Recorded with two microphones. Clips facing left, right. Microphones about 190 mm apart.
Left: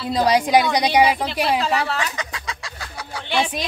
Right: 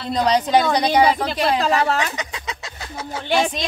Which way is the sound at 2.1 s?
20° right (ahead or behind).